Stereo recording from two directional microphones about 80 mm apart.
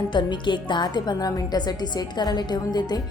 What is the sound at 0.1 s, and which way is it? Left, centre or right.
A woman's voice, left.